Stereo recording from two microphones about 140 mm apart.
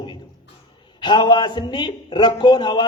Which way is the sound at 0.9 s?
35° left (ahead or behind).